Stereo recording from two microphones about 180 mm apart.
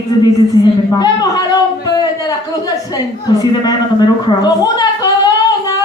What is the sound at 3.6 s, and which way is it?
Speech, 20° left (ahead or behind).